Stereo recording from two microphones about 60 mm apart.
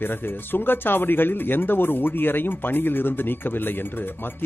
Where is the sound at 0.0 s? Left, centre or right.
Left.